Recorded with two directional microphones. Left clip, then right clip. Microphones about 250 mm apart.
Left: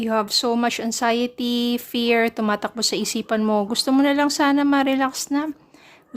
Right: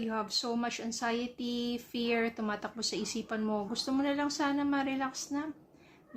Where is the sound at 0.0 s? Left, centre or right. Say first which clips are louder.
Left 13 dB; left.